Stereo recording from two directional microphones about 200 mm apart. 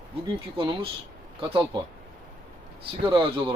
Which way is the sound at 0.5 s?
25° right (ahead or behind).